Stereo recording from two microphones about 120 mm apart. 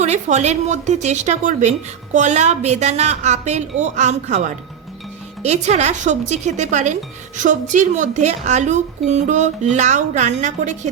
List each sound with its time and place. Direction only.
0.0 s a woman's voice: 75° right (ahead or behind)
5.4 s a woman's voice: 70° right (ahead or behind)